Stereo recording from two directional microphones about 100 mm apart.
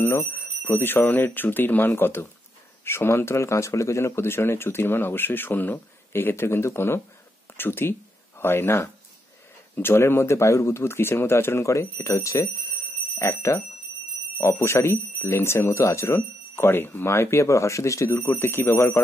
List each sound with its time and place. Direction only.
0.0 s speech: 30° left (ahead or behind)